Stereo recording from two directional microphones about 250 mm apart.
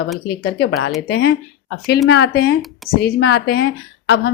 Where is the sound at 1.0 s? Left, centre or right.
Left.